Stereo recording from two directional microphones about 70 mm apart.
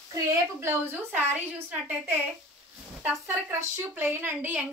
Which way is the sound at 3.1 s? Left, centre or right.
Right.